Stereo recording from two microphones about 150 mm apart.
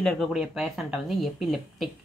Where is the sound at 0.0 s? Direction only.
Centre (ahead or behind).